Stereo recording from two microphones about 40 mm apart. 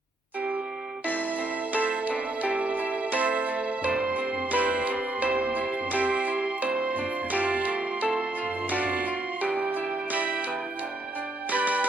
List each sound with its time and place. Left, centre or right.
1.7 s music: right
11.5 s music: right